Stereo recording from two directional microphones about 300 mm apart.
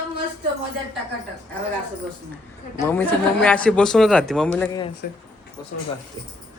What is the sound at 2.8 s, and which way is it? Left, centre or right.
Speech, centre.